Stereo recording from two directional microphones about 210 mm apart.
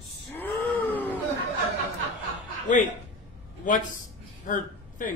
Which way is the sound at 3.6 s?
40° left (ahead or behind).